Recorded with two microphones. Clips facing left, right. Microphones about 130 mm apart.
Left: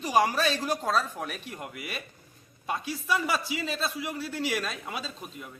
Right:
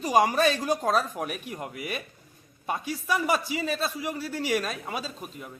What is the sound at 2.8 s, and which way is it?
Speech, 15° right (ahead or behind).